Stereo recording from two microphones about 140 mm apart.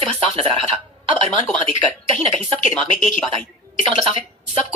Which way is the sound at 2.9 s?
5° left (ahead or behind).